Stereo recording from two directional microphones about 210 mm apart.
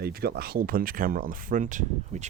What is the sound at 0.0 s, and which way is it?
Speech, 50° right (ahead or behind).